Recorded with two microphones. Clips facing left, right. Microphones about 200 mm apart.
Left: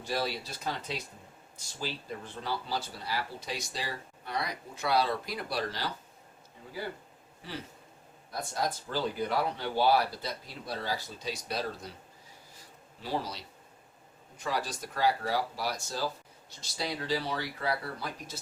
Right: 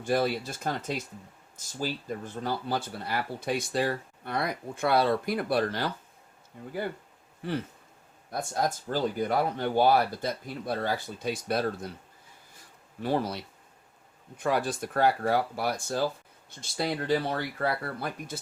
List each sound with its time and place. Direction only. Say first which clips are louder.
0.0 s speech: right 7 dB; 50° right (ahead or behind)
8.3 s speech: right 4 dB; 50° right (ahead or behind)
13.0 s speech: right 6 dB; 55° right (ahead or behind)